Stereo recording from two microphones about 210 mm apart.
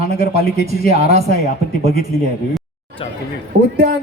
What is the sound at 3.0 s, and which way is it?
Speech, 25° left (ahead or behind).